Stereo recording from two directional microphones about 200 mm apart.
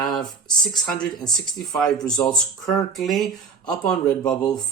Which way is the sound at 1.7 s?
Centre (ahead or behind).